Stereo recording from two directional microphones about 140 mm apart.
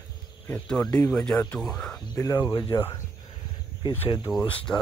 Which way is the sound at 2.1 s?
25° left (ahead or behind).